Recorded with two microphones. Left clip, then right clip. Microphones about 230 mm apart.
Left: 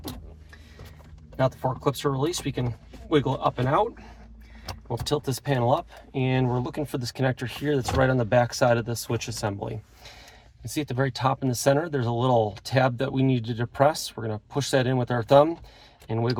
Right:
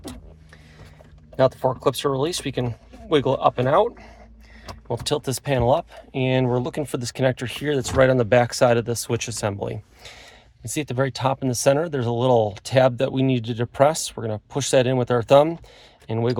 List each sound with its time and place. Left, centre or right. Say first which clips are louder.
1.4 s speech: right 6 dB; right
4.9 s speech: right 3 dB; right